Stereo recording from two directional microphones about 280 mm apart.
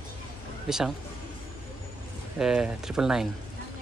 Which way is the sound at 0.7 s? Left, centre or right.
Centre.